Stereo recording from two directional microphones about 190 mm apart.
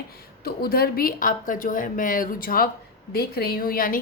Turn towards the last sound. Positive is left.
turn(degrees=45)  # may be behind; listen again after turning